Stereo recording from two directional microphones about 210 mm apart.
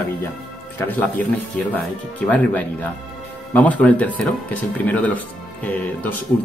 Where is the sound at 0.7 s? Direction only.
10° left (ahead or behind).